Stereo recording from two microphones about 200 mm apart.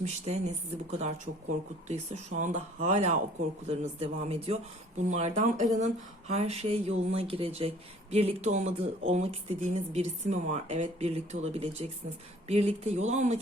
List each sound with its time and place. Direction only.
0.0 s speech: 35° right (ahead or behind)